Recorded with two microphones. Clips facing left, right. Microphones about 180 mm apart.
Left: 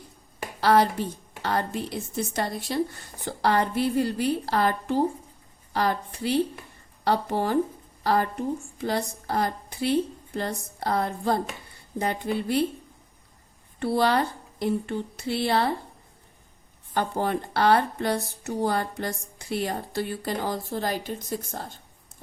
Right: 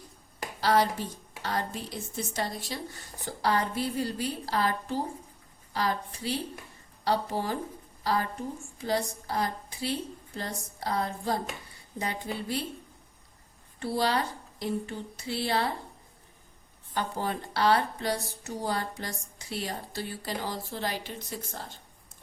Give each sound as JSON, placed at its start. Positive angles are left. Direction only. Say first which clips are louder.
{"t": 0.6, "sound": "a woman's voice", "louder": "left 5 dB", "side_deg": 60}
{"t": 13.7, "sound": "a woman's voice", "louder": "left 5 dB", "side_deg": 60}
{"t": 16.9, "sound": "a woman's voice", "louder": "left 6 dB", "side_deg": 55}